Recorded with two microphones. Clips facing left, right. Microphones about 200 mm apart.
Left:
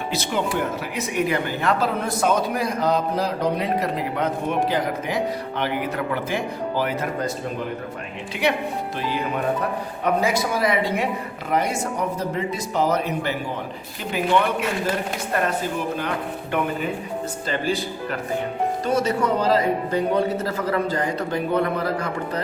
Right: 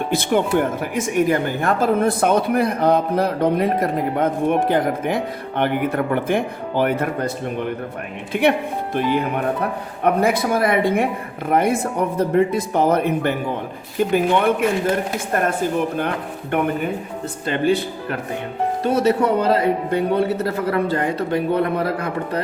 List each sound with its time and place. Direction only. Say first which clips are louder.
0.1 s speech: right 6 dB; 55° right (ahead or behind)
16.0 s speech: right 3 dB; 55° right (ahead or behind)